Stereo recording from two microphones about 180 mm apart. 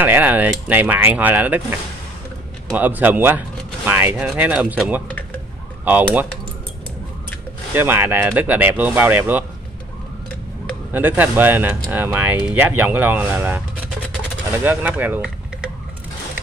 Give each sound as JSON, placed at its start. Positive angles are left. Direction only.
{"t": 0.0, "sound": "speech", "side_deg": -10}
{"t": 2.7, "sound": "speech", "side_deg": -10}
{"t": 7.7, "sound": "speech", "side_deg": -10}
{"t": 10.9, "sound": "speech", "side_deg": -10}
{"t": 14.6, "sound": "speech", "side_deg": -10}